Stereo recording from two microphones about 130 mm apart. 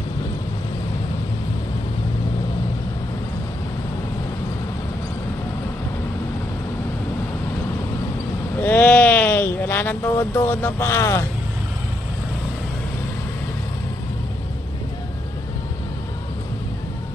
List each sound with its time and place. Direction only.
8.6 s sheep: 10° left (ahead or behind)